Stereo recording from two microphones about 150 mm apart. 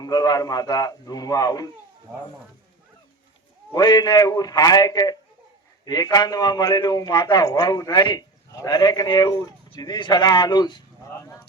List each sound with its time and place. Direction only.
0.0 s a man's voice: 25° left (ahead or behind)
3.7 s a man's voice: 25° left (ahead or behind)